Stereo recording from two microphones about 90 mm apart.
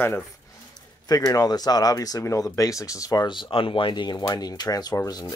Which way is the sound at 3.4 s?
75° left (ahead or behind).